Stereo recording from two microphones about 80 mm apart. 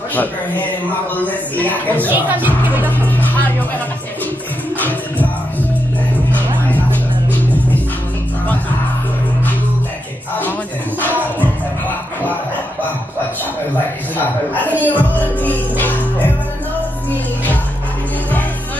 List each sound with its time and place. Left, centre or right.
0.1 s music: left
2.0 s speech: right
3.1 s music: left
4.7 s music: left
6.3 s music: left
14.1 s music: left